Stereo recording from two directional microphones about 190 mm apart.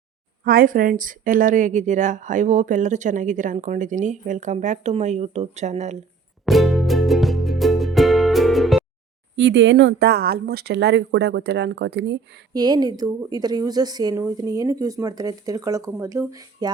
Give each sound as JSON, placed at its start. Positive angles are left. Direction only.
{"t": 0.4, "sound": "speech", "side_deg": -50}
{"t": 6.4, "sound": "music", "side_deg": 0}
{"t": 9.3, "sound": "speech", "side_deg": -70}
{"t": 12.5, "sound": "speech", "side_deg": -20}